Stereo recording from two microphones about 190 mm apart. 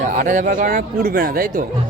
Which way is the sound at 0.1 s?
45° right (ahead or behind).